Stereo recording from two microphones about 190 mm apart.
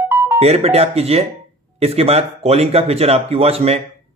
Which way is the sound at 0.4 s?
35° right (ahead or behind).